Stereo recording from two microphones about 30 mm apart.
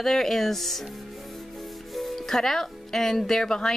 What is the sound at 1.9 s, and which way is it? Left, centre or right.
Speech, centre.